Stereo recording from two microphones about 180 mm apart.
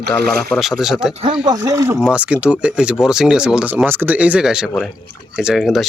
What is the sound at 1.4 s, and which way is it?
Speech, 20° right (ahead or behind).